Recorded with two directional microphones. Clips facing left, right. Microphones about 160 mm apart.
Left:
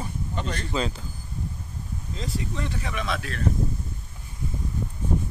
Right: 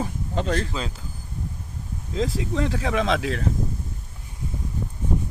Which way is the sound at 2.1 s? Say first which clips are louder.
Right 7 dB; 90° right.